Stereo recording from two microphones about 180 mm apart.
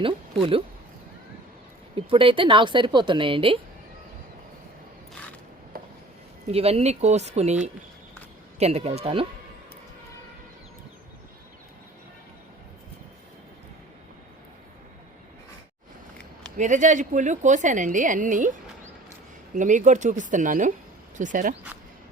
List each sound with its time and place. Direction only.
2.0 s a woman's voice: 30° right (ahead or behind)
5.7 s a sound: 55° right (ahead or behind)
6.5 s speech: 35° right (ahead or behind)
16.6 s a woman's voice: 45° right (ahead or behind)
19.5 s a woman's voice: 45° right (ahead or behind)